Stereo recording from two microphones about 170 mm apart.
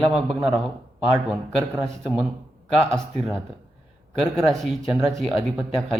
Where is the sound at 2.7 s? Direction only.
Centre (ahead or behind).